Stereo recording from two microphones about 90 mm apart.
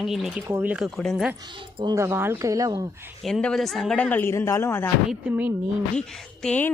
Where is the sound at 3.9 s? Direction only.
20° left (ahead or behind).